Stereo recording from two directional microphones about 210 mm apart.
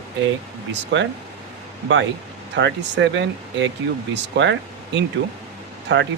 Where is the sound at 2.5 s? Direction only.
60° right (ahead or behind).